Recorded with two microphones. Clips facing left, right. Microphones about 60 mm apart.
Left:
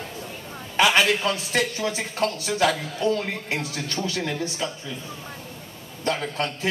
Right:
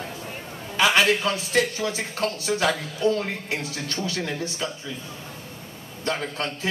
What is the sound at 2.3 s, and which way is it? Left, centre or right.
Speech, right.